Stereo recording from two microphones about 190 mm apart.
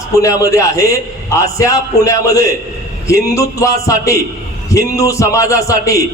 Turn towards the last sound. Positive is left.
turn(degrees=15)  # may be behind; listen again after turning